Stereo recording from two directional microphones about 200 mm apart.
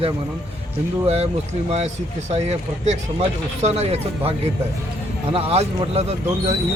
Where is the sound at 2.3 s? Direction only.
35° right (ahead or behind).